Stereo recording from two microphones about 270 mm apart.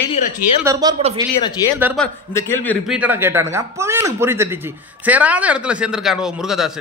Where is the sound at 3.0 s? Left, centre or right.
Centre.